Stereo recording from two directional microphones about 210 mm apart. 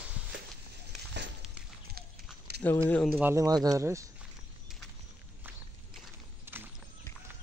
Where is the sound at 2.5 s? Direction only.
50° right (ahead or behind).